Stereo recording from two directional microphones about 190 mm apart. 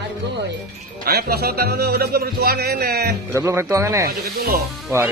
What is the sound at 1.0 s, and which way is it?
Speech, 55° right (ahead or behind).